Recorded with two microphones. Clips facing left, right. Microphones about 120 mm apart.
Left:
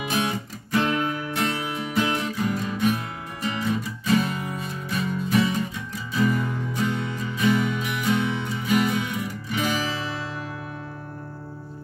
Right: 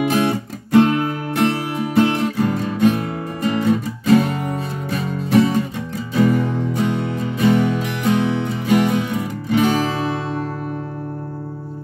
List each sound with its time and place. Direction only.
0.1 s music: 60° right (ahead or behind)
8.9 s music: 35° right (ahead or behind)
9.2 s music: 60° right (ahead or behind)